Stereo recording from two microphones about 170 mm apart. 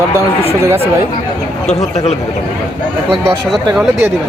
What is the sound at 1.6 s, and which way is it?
Speech, 40° left (ahead or behind).